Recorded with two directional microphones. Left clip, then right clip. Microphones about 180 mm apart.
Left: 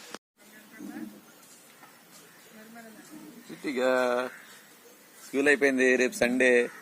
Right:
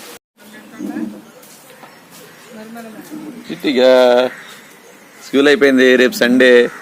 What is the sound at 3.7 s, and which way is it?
Speech, 10° right (ahead or behind).